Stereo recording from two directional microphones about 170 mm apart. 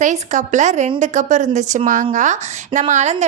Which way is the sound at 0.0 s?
45° right (ahead or behind).